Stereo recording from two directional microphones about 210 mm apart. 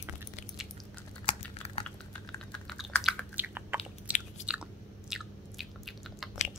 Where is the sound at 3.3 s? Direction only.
10° right (ahead or behind).